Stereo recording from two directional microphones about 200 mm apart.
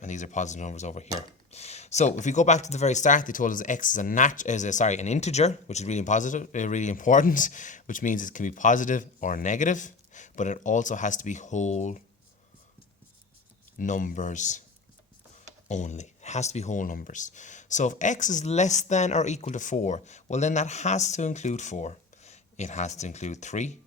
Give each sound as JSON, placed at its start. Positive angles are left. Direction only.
{"t": 0.0, "sound": "speech", "side_deg": 35}
{"t": 13.7, "sound": "speech", "side_deg": 40}
{"t": 15.7, "sound": "speech", "side_deg": 35}